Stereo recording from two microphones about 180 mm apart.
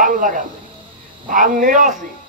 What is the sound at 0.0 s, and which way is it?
A man's voice, 45° right (ahead or behind).